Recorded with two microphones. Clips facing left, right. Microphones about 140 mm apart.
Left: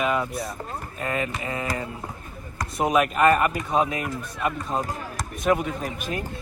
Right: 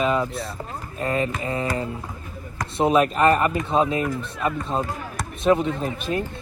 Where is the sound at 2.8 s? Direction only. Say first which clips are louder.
Right 2 dB; 30° right (ahead or behind).